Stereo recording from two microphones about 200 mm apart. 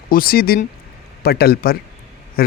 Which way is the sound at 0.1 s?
50° left (ahead or behind).